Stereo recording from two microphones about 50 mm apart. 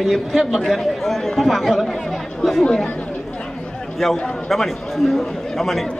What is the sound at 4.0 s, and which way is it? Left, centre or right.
Speech, centre.